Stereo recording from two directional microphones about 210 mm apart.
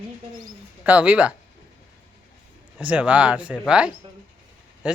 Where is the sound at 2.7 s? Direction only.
5° right (ahead or behind).